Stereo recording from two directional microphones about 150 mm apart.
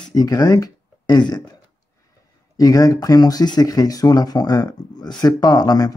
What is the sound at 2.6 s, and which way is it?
Speech, 25° left (ahead or behind).